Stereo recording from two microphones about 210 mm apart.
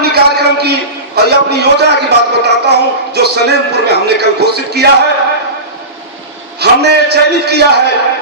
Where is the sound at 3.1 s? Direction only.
50° right (ahead or behind).